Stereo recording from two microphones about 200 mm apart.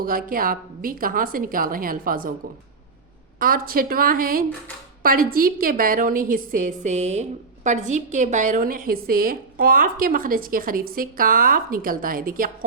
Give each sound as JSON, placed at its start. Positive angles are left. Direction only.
{"t": 0.0, "sound": "a woman's voice", "side_deg": -45}
{"t": 3.3, "sound": "a woman's voice", "side_deg": -45}